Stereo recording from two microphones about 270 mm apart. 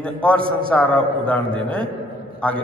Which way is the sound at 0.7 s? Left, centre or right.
Centre.